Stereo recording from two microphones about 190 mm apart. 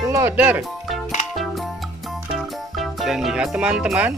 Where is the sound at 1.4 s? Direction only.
Centre (ahead or behind).